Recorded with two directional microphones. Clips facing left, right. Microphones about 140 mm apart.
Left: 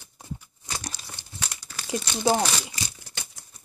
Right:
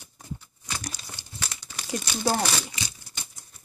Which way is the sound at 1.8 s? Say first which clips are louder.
Left 3 dB; 20° left (ahead or behind).